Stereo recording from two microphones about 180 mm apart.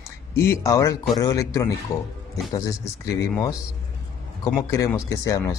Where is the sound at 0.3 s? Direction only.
15° left (ahead or behind).